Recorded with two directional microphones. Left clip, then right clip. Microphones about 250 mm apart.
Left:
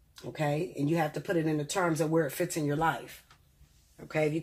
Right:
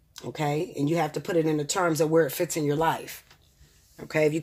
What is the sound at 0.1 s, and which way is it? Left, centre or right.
Speech, right.